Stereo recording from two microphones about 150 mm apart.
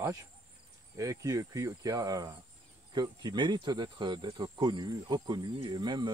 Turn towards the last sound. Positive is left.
turn(degrees=-30)  # may be behind; listen again after turning